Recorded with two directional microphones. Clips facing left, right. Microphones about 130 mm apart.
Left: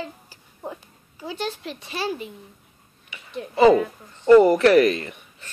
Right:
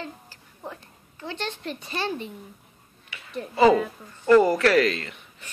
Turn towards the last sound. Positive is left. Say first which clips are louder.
# left 5 dB
turn(degrees=20)  # may be behind; listen again after turning